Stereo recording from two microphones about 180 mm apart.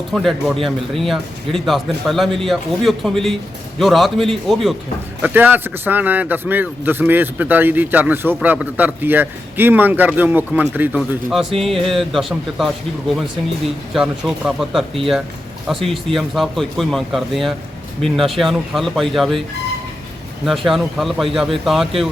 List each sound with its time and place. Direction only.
0.1 s speech: centre (ahead or behind)
5.2 s a man's voice: 10° right (ahead or behind)
20.4 s speech: centre (ahead or behind)